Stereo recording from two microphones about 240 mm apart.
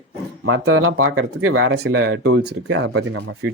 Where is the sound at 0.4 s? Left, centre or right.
Right.